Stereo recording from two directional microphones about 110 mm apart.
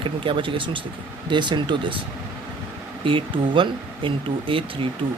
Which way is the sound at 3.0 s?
50° right (ahead or behind).